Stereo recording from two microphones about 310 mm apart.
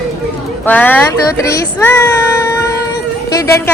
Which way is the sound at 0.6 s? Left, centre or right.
Centre.